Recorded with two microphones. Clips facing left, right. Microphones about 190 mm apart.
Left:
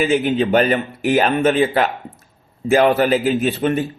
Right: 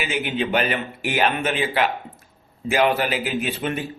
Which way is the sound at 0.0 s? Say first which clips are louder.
Left 8 dB; 40° left (ahead or behind).